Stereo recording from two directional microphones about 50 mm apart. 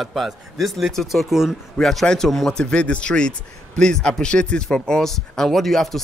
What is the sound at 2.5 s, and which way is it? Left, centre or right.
Speech, centre.